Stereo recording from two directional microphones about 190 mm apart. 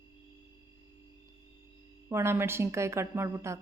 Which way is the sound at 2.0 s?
15° right (ahead or behind).